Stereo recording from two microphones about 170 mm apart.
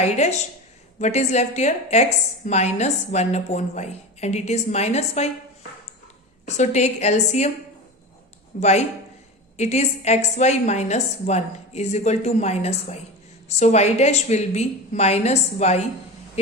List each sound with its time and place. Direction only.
0.0 s a woman's voice: 40° left (ahead or behind)
6.4 s a woman's voice: 45° left (ahead or behind)
8.5 s a woman's voice: 45° left (ahead or behind)